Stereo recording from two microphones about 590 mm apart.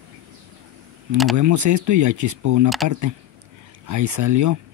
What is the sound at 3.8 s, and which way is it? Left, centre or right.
Speech, right.